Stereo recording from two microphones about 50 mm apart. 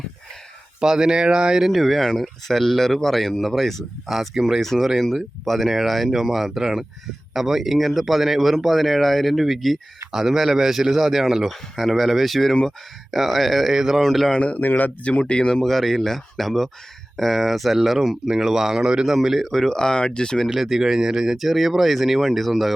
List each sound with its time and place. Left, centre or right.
0.8 s speech: centre
1.6 s speech: centre
4.6 s speech: centre
14.3 s speech: left
14.6 s speech: left
15.2 s speech: centre
15.6 s speech: centre
19.5 s speech: centre
20.5 s speech: centre